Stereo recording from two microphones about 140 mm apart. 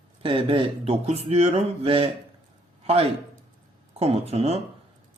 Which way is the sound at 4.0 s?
45° right (ahead or behind).